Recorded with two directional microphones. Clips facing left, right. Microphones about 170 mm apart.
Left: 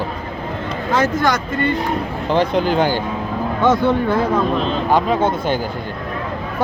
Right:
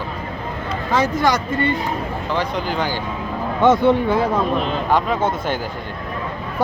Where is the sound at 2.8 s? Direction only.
50° left (ahead or behind).